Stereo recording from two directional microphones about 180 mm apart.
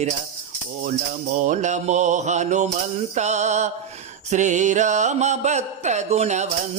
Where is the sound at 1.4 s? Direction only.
45° right (ahead or behind).